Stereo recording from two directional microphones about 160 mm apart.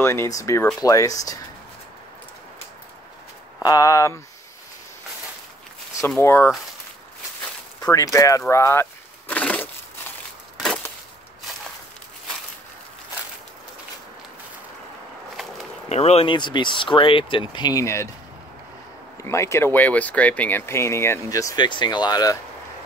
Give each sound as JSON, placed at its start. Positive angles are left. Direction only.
{"t": 0.0, "sound": "speech", "side_deg": 15}
{"t": 3.6, "sound": "speech", "side_deg": 20}
{"t": 6.0, "sound": "speech", "side_deg": 15}
{"t": 7.9, "sound": "speech", "side_deg": 20}
{"t": 9.3, "sound": "crushing", "side_deg": 10}
{"t": 15.9, "sound": "speech", "side_deg": 40}
{"t": 19.2, "sound": "speech", "side_deg": 20}